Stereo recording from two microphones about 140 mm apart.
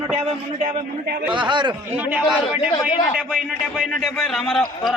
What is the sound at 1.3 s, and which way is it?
Speech, 35° right (ahead or behind).